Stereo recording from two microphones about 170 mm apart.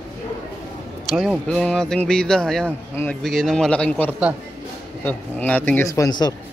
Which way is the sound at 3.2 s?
Centre (ahead or behind).